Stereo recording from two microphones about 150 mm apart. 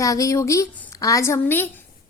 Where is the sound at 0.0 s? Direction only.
20° left (ahead or behind).